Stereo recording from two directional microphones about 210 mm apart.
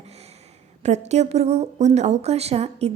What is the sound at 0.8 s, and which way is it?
Speech, 30° right (ahead or behind).